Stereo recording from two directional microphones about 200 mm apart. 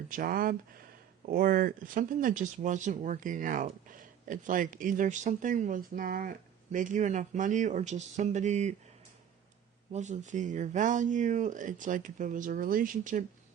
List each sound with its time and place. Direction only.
0.1 s speech: 45° right (ahead or behind)
9.9 s speech: 35° right (ahead or behind)